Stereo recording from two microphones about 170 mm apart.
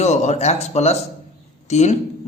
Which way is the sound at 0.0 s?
40° left (ahead or behind).